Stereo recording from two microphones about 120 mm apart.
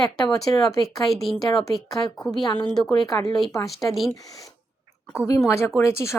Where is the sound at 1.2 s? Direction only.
Centre (ahead or behind).